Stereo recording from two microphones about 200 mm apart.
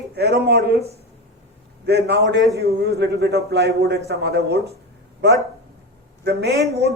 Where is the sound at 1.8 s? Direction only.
55° right (ahead or behind).